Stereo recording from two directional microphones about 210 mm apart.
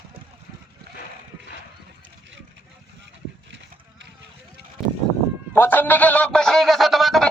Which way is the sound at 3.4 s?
60° right (ahead or behind).